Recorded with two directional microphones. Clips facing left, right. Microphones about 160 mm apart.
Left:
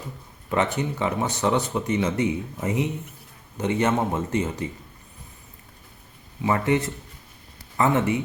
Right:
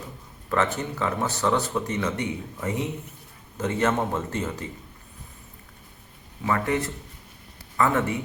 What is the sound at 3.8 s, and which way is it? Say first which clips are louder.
Speech: left 1 dB; 15° left (ahead or behind).